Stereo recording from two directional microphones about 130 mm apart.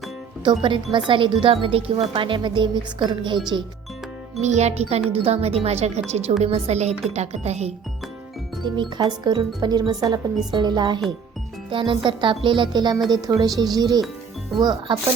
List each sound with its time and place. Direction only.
0.4 s speech: 40° right (ahead or behind)
4.4 s speech: 60° right (ahead or behind)
8.6 s speech: 35° right (ahead or behind)